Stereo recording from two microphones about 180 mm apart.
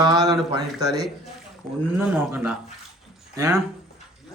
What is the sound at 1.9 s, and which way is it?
Speech, 10° right (ahead or behind).